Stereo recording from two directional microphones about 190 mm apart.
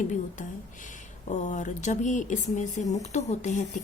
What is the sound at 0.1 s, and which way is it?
A woman's voice, 40° left (ahead or behind).